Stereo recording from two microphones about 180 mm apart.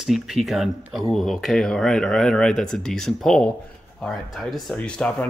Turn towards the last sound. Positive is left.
turn(degrees=5)  # may be behind; listen again after turning